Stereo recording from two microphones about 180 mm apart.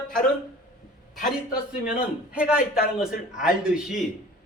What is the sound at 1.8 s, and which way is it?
A man's voice, 5° right (ahead or behind).